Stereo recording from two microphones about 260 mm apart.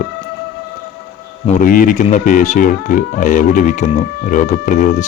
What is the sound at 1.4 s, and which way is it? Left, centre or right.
Speech, left.